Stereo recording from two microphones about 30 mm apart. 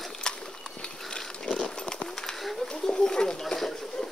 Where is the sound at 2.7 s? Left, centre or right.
Left.